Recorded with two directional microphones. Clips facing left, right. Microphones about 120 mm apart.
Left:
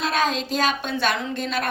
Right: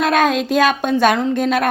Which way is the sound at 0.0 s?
55° right (ahead or behind).